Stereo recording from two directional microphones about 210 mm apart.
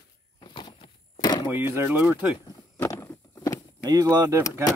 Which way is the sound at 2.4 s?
15° left (ahead or behind).